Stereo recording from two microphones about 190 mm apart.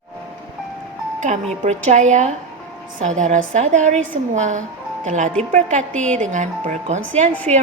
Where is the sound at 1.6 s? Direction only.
40° right (ahead or behind).